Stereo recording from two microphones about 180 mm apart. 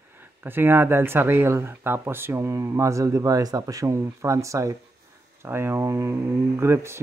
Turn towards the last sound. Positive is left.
turn(degrees=-15)  # may be behind; listen again after turning